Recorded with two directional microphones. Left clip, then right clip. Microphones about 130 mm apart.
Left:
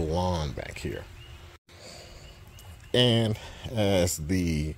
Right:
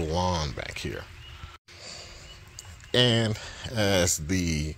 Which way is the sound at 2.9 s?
20° left (ahead or behind).